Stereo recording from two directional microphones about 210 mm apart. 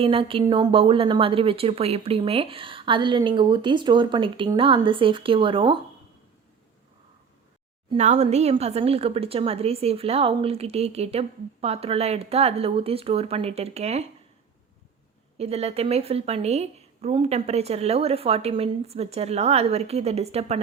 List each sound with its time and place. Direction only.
0.0 s speech: 25° right (ahead or behind)
7.9 s speech: 30° right (ahead or behind)
15.4 s speech: 30° right (ahead or behind)